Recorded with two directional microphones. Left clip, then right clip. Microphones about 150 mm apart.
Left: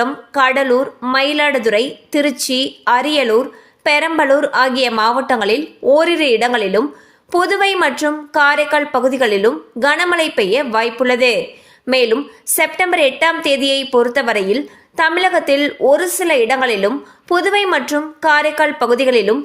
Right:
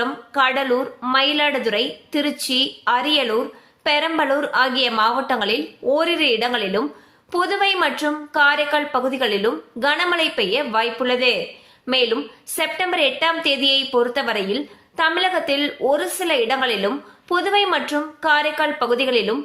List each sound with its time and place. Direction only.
0.0 s a woman's voice: 40° left (ahead or behind)